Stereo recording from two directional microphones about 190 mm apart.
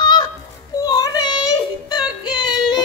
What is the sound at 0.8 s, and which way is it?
Child singing, 20° left (ahead or behind).